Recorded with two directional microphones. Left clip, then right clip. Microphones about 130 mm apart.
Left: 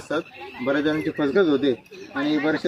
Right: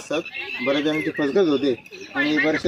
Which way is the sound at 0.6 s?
5° left (ahead or behind).